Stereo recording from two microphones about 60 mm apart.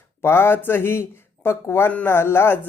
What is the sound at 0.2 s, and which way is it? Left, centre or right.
Speech, left.